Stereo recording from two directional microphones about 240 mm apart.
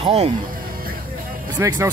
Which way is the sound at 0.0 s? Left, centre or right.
Right.